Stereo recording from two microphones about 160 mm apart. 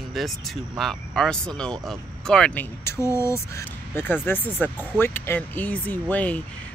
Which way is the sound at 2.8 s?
15° left (ahead or behind).